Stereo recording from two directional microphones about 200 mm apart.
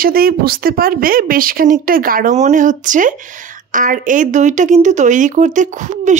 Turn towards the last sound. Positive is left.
turn(degrees=-40)  # may be behind; listen again after turning